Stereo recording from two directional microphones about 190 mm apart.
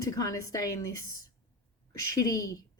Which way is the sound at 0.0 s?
20° left (ahead or behind).